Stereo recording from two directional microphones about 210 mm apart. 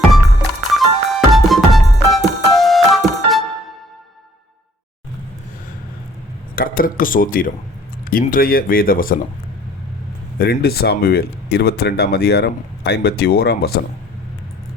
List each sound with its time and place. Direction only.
0.7 s music: centre (ahead or behind)
6.6 s speech: 40° left (ahead or behind)
10.3 s speech: 50° left (ahead or behind)